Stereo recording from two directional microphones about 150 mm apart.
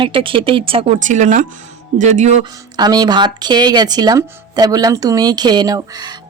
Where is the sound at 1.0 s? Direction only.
55° right (ahead or behind).